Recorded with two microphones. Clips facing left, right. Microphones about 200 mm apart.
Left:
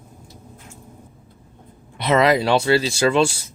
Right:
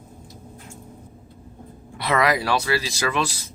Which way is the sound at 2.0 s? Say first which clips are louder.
Left 5 dB; 25° left (ahead or behind).